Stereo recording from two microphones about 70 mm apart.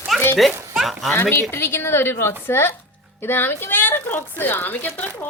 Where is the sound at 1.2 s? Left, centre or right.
Left.